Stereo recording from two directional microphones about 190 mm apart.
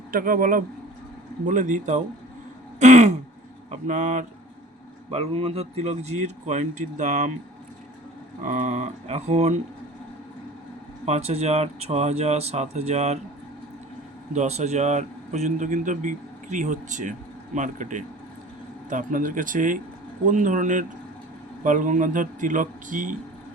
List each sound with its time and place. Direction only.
0.1 s a man's voice: 50° right (ahead or behind)
2.7 s throat clearing: 35° right (ahead or behind)
3.7 s speech: 40° right (ahead or behind)
8.4 s speech: 40° right (ahead or behind)
11.0 s speech: 35° right (ahead or behind)
14.3 s a man's voice: 35° right (ahead or behind)